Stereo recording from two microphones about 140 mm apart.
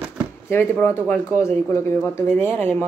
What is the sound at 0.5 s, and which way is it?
Speech, 15° left (ahead or behind).